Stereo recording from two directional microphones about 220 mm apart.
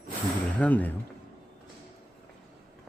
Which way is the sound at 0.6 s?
5° left (ahead or behind).